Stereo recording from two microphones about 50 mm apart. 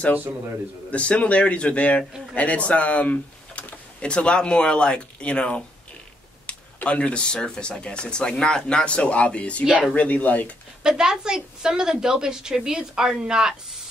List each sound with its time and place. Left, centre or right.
0.8 s speech: left
10.8 s a woman's voice: centre